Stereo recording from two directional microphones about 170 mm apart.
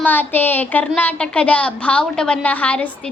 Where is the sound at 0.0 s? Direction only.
10° left (ahead or behind).